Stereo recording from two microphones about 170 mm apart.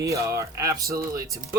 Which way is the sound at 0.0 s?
20° right (ahead or behind).